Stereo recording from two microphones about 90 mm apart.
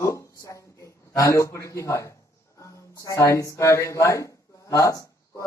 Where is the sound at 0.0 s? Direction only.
35° left (ahead or behind).